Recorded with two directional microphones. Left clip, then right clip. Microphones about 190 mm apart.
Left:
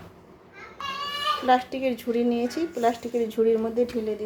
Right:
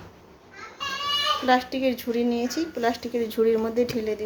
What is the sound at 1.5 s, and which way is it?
Speech, 15° left (ahead or behind).